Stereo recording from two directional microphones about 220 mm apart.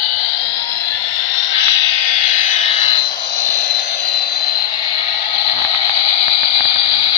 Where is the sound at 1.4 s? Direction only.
55° left (ahead or behind).